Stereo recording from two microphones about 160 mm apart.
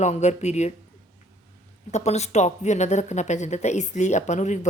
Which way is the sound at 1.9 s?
45° left (ahead or behind).